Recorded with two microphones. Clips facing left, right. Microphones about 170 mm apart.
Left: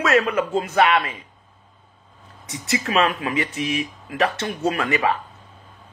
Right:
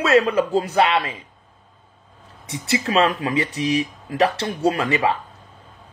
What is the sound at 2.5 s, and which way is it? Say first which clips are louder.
Speech: right 2 dB; 25° right (ahead or behind).